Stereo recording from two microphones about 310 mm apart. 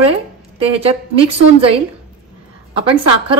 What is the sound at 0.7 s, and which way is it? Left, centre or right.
Speech, centre.